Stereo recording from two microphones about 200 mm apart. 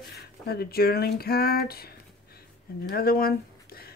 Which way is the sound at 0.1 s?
50° left (ahead or behind).